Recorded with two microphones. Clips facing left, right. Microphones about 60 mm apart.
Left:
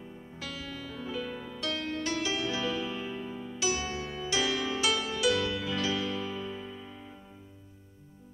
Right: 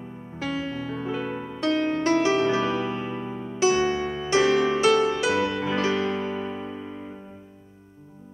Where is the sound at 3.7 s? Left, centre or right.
Right.